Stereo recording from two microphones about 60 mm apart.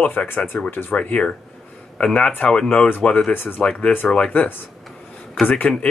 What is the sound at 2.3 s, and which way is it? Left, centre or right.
Speech, left.